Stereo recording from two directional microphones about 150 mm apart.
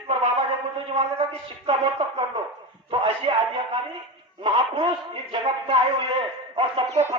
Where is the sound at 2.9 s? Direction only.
35° right (ahead or behind).